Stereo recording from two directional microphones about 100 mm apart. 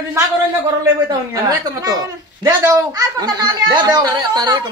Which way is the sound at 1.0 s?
40° right (ahead or behind).